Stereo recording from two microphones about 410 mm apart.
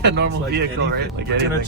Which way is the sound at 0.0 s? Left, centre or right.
Right.